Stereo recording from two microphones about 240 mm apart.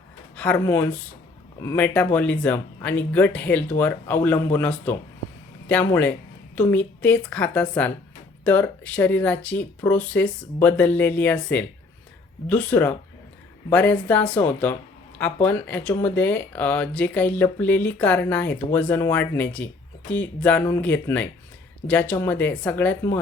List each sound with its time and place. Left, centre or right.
0.3 s a woman's voice: centre